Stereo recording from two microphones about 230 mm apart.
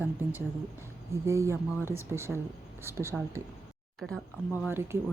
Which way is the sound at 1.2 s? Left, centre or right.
Centre.